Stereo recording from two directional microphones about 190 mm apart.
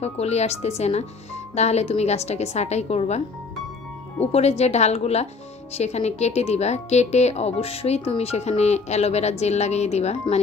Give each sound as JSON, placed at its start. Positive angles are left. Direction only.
{"t": 0.0, "sound": "speech", "side_deg": 35}
{"t": 4.3, "sound": "speech", "side_deg": 35}